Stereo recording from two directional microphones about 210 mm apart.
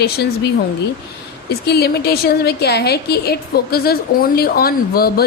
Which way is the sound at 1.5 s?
50° left (ahead or behind).